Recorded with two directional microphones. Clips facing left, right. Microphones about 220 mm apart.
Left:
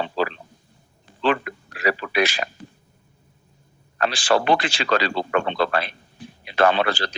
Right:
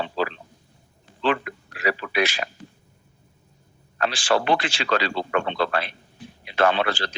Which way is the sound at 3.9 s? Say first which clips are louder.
Left 2 dB; 40° left (ahead or behind).